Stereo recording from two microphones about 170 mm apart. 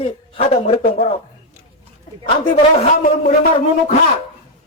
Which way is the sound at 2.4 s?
50° left (ahead or behind).